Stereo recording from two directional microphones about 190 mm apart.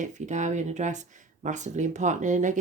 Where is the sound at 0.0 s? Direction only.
40° right (ahead or behind).